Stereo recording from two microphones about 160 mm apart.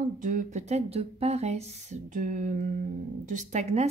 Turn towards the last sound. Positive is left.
turn(degrees=-45)  # may be behind; listen again after turning